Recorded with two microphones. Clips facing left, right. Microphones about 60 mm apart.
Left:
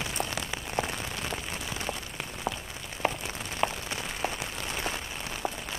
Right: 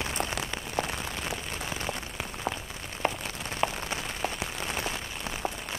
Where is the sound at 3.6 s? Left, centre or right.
Centre.